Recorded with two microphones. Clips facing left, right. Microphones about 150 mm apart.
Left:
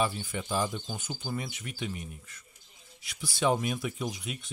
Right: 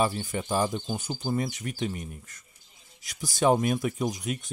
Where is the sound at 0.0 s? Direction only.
40° right (ahead or behind).